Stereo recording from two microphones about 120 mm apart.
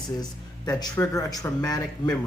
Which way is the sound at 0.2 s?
30° left (ahead or behind).